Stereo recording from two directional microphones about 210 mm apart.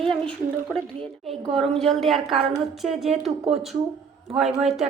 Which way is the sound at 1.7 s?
Centre (ahead or behind).